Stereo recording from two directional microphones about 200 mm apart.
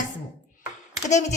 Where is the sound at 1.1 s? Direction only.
35° left (ahead or behind).